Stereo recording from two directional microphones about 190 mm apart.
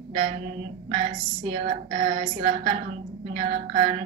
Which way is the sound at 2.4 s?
45° right (ahead or behind).